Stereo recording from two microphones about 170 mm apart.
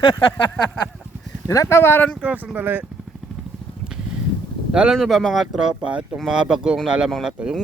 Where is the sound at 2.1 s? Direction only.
10° right (ahead or behind).